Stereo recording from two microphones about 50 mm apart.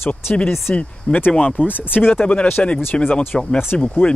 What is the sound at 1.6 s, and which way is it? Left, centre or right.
Speech, left.